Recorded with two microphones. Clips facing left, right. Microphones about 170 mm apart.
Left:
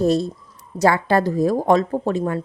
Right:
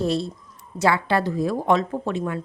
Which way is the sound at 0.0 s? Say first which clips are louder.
Left 5 dB; 45° left (ahead or behind).